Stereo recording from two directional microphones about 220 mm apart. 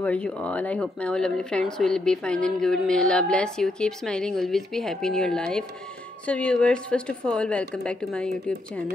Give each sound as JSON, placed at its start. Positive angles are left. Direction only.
{"t": 0.0, "sound": "speech", "side_deg": 5}